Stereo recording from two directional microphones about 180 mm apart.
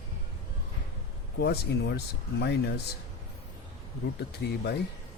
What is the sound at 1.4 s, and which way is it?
Speech, 65° left (ahead or behind).